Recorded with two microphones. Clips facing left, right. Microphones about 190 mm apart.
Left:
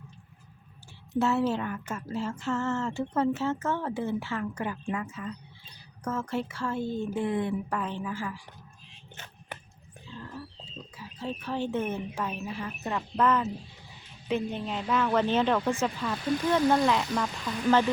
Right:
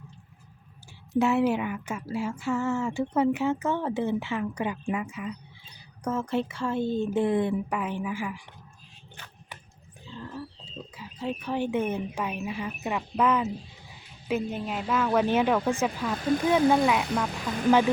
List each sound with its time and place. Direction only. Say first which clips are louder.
1.2 s speech: right 3 dB; 15° right (ahead or behind)
7.7 s speech: right 2 dB; 10° right (ahead or behind)
9.5 s pig: left 5 dB; 55° left (ahead or behind)
10.9 s speech: right 3 dB; 15° right (ahead or behind)
16.2 s speech: right 4 dB; 50° right (ahead or behind)
16.6 s speech: right 2 dB; 5° right (ahead or behind)